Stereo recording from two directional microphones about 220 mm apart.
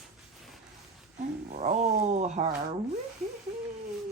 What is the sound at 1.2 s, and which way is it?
Speech, 35° right (ahead or behind).